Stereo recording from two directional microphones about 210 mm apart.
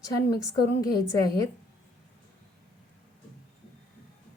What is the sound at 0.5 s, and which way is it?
Speech, 20° left (ahead or behind).